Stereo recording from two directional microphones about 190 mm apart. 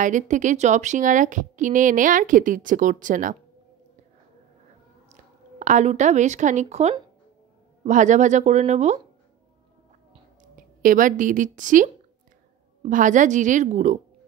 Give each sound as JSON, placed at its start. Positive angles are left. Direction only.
{"t": 0.0, "sound": "speech", "side_deg": -40}
{"t": 5.1, "sound": "speech", "side_deg": -40}
{"t": 10.5, "sound": "a woman's voice", "side_deg": -45}